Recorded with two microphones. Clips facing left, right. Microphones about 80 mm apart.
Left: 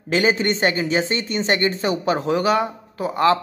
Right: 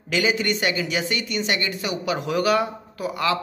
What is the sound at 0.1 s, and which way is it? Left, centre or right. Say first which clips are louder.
Speech: left 3 dB; left.